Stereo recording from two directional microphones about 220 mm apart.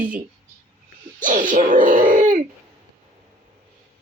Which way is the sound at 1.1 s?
35° right (ahead or behind).